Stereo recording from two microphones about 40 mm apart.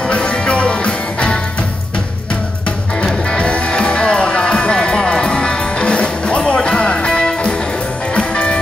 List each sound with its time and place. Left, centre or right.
0.1 s music: left
3.0 s music: left